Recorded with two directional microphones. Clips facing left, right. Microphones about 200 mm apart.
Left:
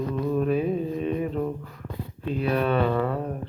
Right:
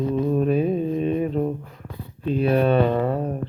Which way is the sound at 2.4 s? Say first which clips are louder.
Right 5 dB; 30° right (ahead or behind).